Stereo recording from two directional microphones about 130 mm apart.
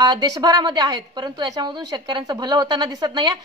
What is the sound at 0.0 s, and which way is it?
A woman's voice, 35° right (ahead or behind).